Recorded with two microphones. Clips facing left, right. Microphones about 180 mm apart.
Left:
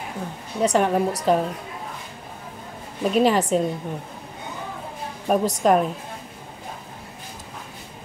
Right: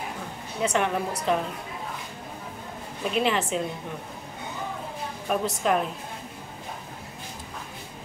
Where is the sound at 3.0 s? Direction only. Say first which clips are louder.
Left 6 dB; 40° left (ahead or behind).